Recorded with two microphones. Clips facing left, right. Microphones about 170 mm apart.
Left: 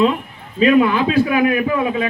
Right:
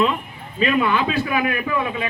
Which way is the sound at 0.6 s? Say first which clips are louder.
Left 6 dB; 40° left (ahead or behind).